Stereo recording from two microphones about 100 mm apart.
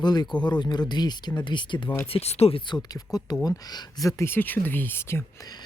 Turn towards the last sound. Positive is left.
turn(degrees=25)  # may be behind; listen again after turning